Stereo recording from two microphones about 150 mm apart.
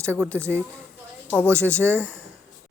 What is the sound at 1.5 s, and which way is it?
Speech, 10° left (ahead or behind).